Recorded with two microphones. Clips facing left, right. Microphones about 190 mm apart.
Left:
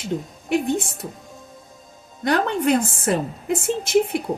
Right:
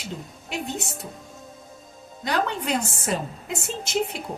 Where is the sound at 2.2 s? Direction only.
55° left (ahead or behind).